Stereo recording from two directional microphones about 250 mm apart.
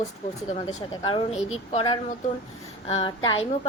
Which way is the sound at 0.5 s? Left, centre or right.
Left.